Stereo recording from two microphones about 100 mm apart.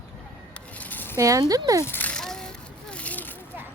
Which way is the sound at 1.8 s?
20° left (ahead or behind).